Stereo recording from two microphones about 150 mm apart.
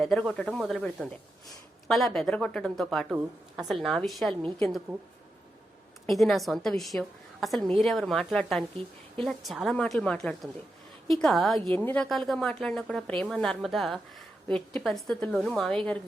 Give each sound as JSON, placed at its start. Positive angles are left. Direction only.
{"t": 0.0, "sound": "a woman's voice", "side_deg": 0}
{"t": 3.1, "sound": "a woman's voice", "side_deg": -10}
{"t": 6.1, "sound": "a woman's voice", "side_deg": 0}